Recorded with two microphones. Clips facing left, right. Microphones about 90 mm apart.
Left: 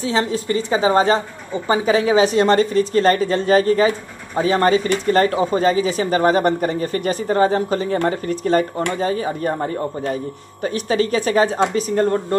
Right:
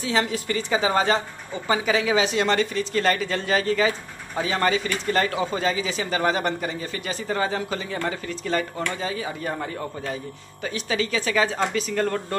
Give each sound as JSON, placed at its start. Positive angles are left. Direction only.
{"t": 0.0, "sound": "a woman's voice", "side_deg": 30}